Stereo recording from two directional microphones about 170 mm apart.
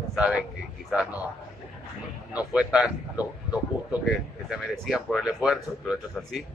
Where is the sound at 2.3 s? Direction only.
5° right (ahead or behind).